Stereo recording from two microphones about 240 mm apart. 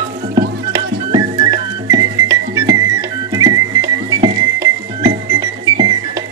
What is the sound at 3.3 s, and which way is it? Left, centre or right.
Music, centre.